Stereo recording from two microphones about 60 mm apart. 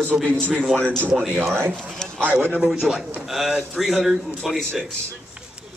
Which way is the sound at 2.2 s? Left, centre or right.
Right.